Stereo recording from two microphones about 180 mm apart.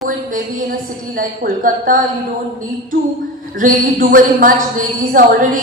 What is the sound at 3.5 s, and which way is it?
A woman's voice, 50° right (ahead or behind).